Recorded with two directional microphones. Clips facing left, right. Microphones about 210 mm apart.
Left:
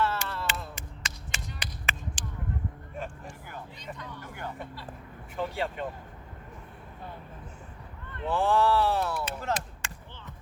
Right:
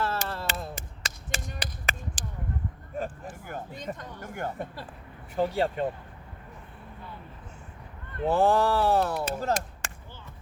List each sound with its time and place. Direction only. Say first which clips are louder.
0.0 s a sound: even; 40° right (ahead or behind)
3.4 s music: right 8 dB; 50° right (ahead or behind)
5.4 s speech: right 6 dB; 40° right (ahead or behind)
8.1 s speech: right 3 dB; 40° right (ahead or behind)
9.3 s chop: right 4 dB; 40° right (ahead or behind)